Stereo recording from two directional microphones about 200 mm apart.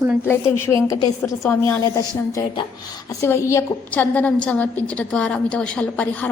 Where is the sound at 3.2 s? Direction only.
10° left (ahead or behind).